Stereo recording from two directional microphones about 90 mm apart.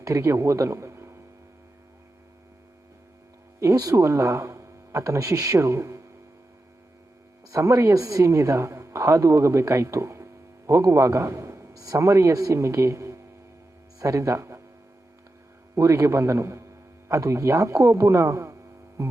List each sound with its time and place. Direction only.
0.0 s a man's voice: 35° right (ahead or behind)
3.6 s speech: 40° right (ahead or behind)
7.5 s a man's voice: 35° right (ahead or behind)
15.7 s speech: 35° right (ahead or behind)